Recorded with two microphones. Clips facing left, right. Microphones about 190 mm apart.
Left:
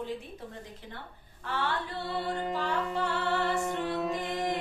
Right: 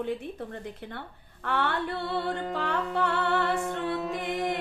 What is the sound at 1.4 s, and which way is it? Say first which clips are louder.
Music: right 4 dB; 60° right (ahead or behind).